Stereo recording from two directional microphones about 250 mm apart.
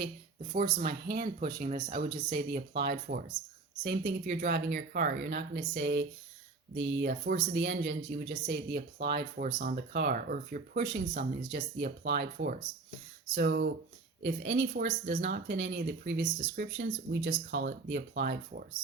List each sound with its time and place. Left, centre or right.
0.5 s speech: right